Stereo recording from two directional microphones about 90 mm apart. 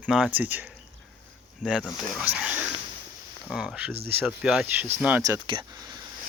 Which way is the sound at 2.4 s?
15° right (ahead or behind).